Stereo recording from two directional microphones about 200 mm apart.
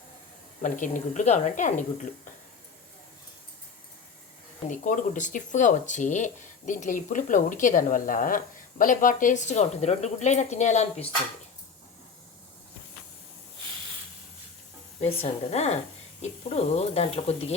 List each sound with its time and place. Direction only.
0.6 s speech: 40° left (ahead or behind)
4.7 s speech: 40° left (ahead or behind)
15.0 s speech: 30° left (ahead or behind)